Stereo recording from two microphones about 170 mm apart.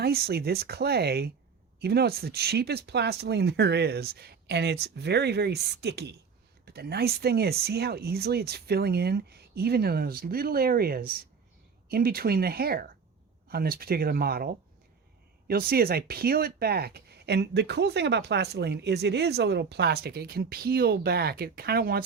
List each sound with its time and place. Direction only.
0.0 s speech: 70° right (ahead or behind)
6.7 s speech: 65° right (ahead or behind)